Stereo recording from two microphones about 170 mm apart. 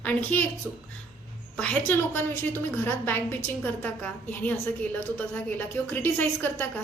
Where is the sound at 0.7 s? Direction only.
Centre (ahead or behind).